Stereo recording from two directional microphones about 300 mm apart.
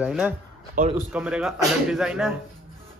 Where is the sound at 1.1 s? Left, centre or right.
Centre.